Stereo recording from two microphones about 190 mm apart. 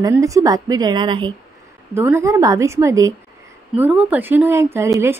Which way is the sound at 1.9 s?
10° right (ahead or behind).